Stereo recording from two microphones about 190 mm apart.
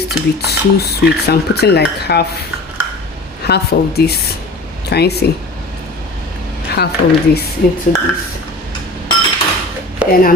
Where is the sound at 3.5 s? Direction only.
60° left (ahead or behind).